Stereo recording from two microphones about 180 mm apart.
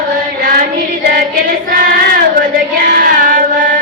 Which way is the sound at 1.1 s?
50° right (ahead or behind).